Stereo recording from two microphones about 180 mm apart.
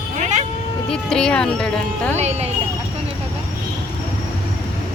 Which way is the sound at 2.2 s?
35° right (ahead or behind).